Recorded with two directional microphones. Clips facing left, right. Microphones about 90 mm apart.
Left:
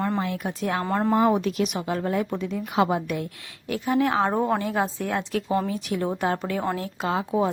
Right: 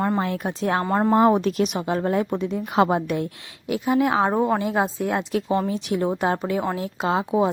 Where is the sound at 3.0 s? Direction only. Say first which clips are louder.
Right 4 dB; 25° right (ahead or behind).